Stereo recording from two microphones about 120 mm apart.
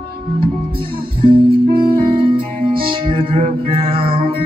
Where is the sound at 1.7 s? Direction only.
45° right (ahead or behind).